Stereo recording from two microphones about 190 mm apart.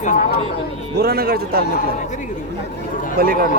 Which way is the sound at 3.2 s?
50° right (ahead or behind).